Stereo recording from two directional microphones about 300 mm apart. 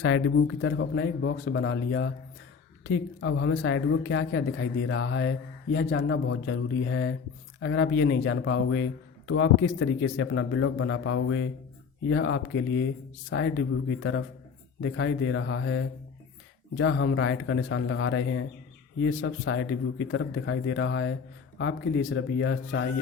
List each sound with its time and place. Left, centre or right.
0.0 s speech: left